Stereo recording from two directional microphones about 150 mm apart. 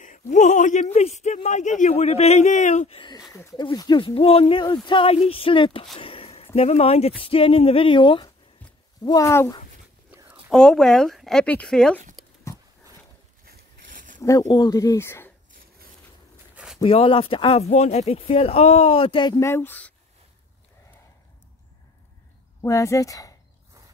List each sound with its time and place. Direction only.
0.0 s speech: 55° left (ahead or behind)
3.3 s speech: 25° left (ahead or behind)
10.5 s speech: 5° left (ahead or behind)
13.5 s a sound: 65° right (ahead or behind)
14.2 s speech: 25° left (ahead or behind)
16.5 s a sound: 5° right (ahead or behind)
16.8 s speech: 35° left (ahead or behind)
19.5 s speech: 15° left (ahead or behind)
22.6 s speech: 20° left (ahead or behind)